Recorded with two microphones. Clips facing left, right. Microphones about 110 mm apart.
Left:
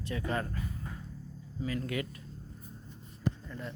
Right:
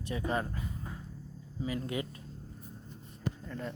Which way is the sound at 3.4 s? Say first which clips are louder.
Right 3 dB; 50° right (ahead or behind).